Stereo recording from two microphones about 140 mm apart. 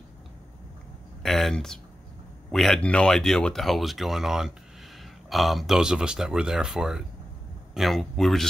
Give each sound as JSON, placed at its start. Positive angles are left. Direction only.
{"t": 1.2, "sound": "speech", "side_deg": 0}